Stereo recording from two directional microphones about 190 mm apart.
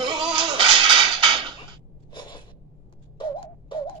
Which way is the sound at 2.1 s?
25° left (ahead or behind).